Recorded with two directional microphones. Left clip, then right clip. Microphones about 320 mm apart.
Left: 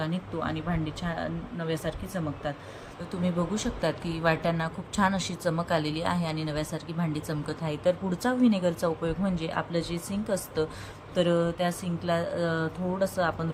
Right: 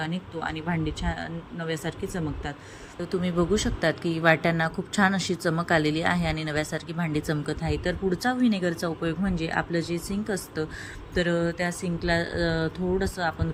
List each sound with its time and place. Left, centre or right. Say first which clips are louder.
0.0 s speech: right 1 dB; centre
3.1 s speech: right 5 dB; centre
11.3 s speech: even; left
12.4 s speech: right 2 dB; centre